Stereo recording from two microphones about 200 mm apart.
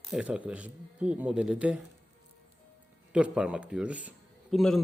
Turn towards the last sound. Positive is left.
turn(degrees=0)  # may be behind; listen again after turning